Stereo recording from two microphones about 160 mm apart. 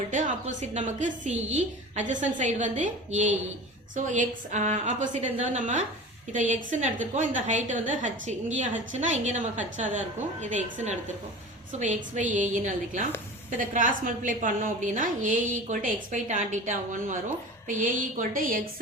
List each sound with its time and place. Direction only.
0.1 s a woman's voice: 50° right (ahead or behind)